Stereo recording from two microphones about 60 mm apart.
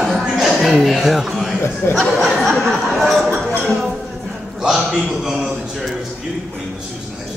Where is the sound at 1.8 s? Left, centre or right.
Left.